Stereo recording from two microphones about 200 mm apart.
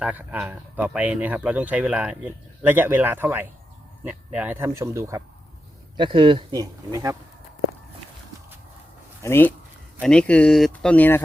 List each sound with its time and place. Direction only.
0.0 s speech: 10° right (ahead or behind)
6.0 s speech: 25° right (ahead or behind)
9.2 s speech: 10° left (ahead or behind)